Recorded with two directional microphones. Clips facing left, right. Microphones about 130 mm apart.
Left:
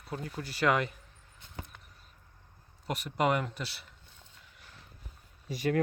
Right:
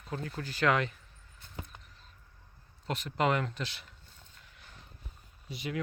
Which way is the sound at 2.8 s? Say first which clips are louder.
Left 1 dB; 10° left (ahead or behind).